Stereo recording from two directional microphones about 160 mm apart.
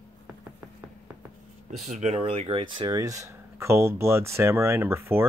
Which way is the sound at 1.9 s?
45° right (ahead or behind).